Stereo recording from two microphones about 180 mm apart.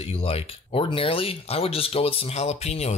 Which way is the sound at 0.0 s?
30° left (ahead or behind).